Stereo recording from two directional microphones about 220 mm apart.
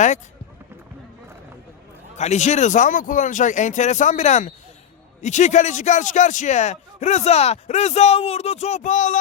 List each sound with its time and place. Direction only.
2.1 s speech: 30° left (ahead or behind)